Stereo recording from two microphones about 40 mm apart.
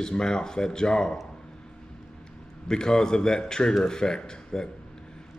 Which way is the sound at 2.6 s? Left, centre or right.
Centre.